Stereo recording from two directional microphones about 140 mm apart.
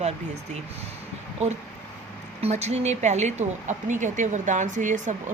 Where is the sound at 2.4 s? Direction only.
50° right (ahead or behind).